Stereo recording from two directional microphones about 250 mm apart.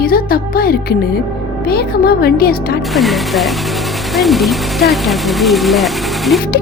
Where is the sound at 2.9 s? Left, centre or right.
Centre.